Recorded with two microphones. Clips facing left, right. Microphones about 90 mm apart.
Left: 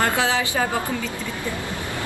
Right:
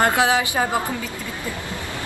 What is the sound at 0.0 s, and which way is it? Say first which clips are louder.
Speech: right 3 dB; 20° right (ahead or behind).